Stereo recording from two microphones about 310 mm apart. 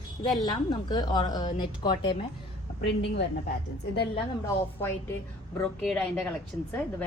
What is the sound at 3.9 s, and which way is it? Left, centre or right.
Speech, centre.